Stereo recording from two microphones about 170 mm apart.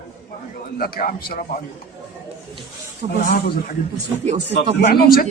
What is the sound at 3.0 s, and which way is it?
Speech, 40° right (ahead or behind).